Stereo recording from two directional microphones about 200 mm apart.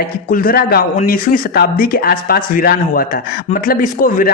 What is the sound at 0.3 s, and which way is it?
A man's voice, 45° left (ahead or behind).